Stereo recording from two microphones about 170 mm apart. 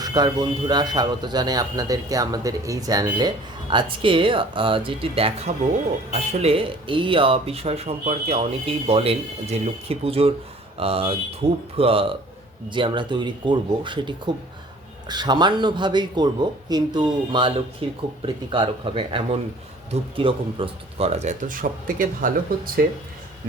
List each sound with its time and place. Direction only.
0.0 s a man's voice: 25° right (ahead or behind); by 22.8 s 55° right (ahead or behind)